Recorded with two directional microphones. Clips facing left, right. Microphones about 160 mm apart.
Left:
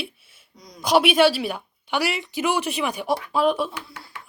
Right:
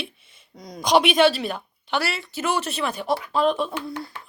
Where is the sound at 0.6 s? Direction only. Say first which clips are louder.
Right 7 dB; 55° right (ahead or behind).